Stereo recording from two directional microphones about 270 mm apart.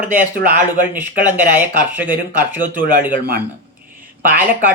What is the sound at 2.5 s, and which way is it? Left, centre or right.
Speech, centre.